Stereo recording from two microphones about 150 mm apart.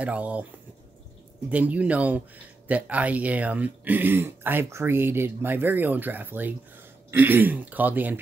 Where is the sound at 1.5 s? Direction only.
10° right (ahead or behind).